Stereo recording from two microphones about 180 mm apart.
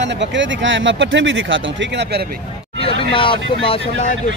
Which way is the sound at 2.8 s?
30° left (ahead or behind).